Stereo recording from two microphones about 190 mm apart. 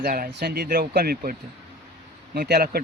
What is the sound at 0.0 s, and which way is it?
Speech, 50° right (ahead or behind).